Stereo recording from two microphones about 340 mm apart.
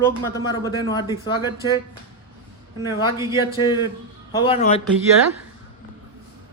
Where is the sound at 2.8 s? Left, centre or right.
Centre.